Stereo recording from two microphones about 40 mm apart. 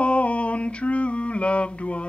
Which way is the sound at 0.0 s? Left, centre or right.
Left.